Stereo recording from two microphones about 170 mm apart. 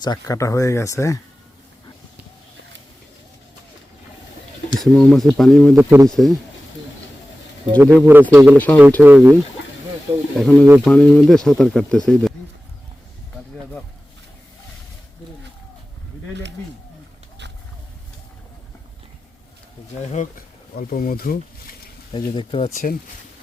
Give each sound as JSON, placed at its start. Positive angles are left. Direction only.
{"t": 0.0, "sound": "speech", "side_deg": 20}
{"t": 4.8, "sound": "speech", "side_deg": 0}
{"t": 5.7, "sound": "speech", "side_deg": -15}
{"t": 6.1, "sound": "speech", "side_deg": 0}
{"t": 7.8, "sound": "speech", "side_deg": -10}
{"t": 8.5, "sound": "speech", "side_deg": 10}
{"t": 9.0, "sound": "speech", "side_deg": -10}
{"t": 10.3, "sound": "speech", "side_deg": 0}
{"t": 16.3, "sound": "a sound", "side_deg": -90}
{"t": 20.0, "sound": "speech", "side_deg": 45}
{"t": 20.7, "sound": "speech", "side_deg": 55}
{"t": 22.1, "sound": "speech", "side_deg": 30}